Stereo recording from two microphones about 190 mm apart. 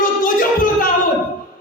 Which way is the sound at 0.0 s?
45° left (ahead or behind).